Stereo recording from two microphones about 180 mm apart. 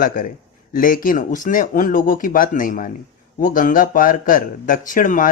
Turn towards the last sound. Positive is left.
turn(degrees=45)  # may be behind; listen again after turning